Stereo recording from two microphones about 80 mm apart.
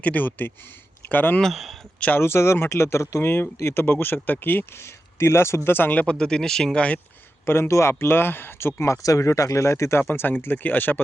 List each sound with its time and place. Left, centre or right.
0.0 s speech: left
1.4 s speech: centre
2.0 s speech: centre
2.2 s speech: left; by 7.0 s centre
7.4 s speech: left